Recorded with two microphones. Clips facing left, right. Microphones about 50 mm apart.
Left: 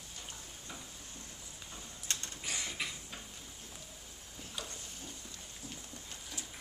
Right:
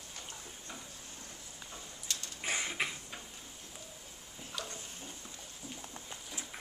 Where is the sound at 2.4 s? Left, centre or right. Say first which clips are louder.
Right 5 dB; right.